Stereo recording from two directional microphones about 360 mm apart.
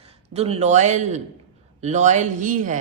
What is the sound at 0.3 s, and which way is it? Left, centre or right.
A man's voice, centre.